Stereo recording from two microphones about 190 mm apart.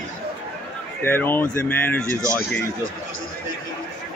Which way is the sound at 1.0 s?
10° left (ahead or behind).